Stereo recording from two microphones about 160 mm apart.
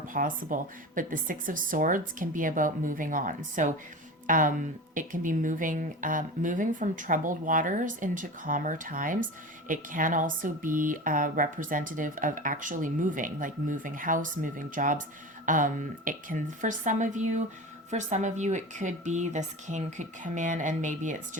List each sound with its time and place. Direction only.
0.1 s a woman's voice: 60° right (ahead or behind)